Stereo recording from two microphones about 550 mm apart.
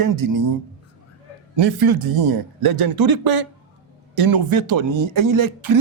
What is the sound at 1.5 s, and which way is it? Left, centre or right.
A man's voice, right.